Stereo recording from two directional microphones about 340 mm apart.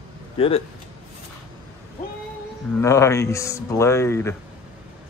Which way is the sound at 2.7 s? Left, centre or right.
Centre.